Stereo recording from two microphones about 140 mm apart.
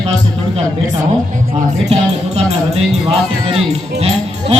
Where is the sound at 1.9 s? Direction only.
50° right (ahead or behind).